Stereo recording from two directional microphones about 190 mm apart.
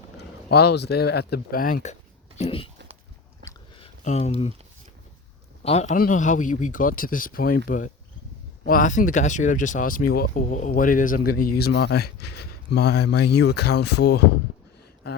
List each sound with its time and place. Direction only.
0.2 s speech: 60° left (ahead or behind); by 2.0 s 40° left (ahead or behind)
2.4 s speech: 30° left (ahead or behind)
3.8 s a sound: 35° left (ahead or behind)
5.6 s speech: 35° left (ahead or behind); by 14.2 s 60° left (ahead or behind)